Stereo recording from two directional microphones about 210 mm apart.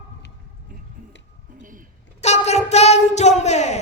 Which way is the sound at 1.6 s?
40° right (ahead or behind).